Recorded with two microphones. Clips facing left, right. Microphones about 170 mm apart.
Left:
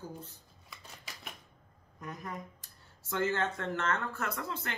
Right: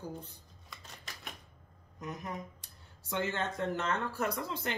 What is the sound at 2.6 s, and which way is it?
Speech, 20° right (ahead or behind).